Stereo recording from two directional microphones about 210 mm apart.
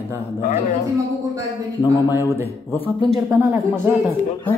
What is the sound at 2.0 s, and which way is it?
Speech, 15° left (ahead or behind).